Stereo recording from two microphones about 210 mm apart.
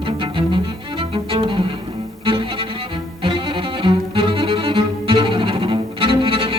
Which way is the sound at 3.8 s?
25° right (ahead or behind).